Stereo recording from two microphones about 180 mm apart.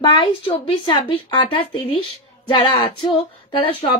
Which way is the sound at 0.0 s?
25° left (ahead or behind).